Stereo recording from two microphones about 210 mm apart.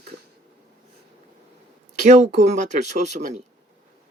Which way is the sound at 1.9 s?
35° right (ahead or behind).